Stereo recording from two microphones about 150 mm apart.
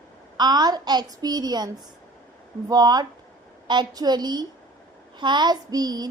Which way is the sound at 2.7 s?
25° right (ahead or behind).